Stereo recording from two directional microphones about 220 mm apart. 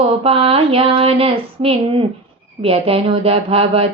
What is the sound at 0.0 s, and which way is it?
Speech, 25° right (ahead or behind).